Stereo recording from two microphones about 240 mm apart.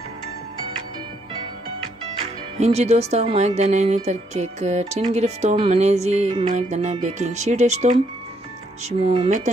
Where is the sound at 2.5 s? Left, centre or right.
Right.